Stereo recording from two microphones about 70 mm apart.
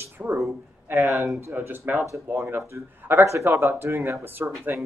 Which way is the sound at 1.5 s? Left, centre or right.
Right.